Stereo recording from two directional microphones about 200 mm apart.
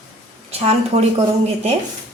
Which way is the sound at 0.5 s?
30° right (ahead or behind).